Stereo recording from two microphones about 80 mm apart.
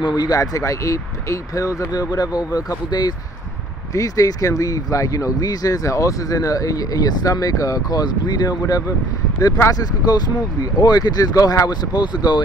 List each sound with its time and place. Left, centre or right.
0.0 s speech: left
3.9 s speech: left